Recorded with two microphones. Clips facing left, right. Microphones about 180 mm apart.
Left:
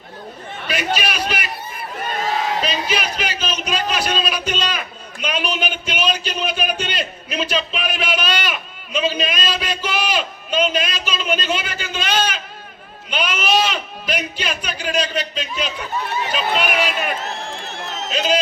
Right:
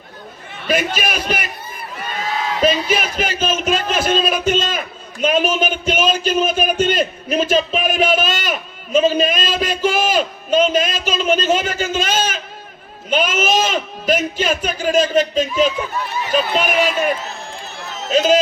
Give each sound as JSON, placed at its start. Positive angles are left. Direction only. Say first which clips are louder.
{"t": 0.9, "sound": "speech", "louder": "right 2 dB", "side_deg": -50}
{"t": 2.6, "sound": "a man's voice", "louder": "right 6 dB", "side_deg": -45}
{"t": 5.2, "sound": "a sound", "louder": "right 7 dB", "side_deg": -45}
{"t": 16.3, "sound": "speech", "louder": "right 5 dB", "side_deg": -45}
{"t": 18.1, "sound": "speech", "louder": "right 7 dB", "side_deg": -45}